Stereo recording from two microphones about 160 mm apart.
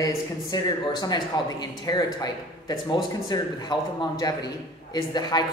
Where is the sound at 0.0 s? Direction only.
25° left (ahead or behind).